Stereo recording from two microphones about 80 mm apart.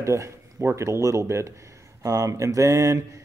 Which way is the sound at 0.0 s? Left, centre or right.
Right.